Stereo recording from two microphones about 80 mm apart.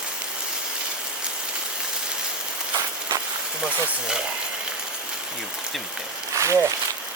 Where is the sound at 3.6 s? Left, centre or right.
Centre.